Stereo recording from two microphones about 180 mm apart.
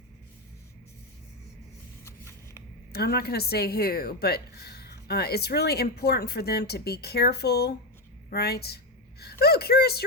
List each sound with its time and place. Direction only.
2.0 s shuffling cards: 15° left (ahead or behind)
2.9 s speech: 60° left (ahead or behind)